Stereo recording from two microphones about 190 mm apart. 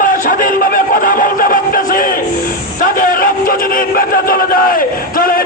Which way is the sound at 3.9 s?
50° left (ahead or behind).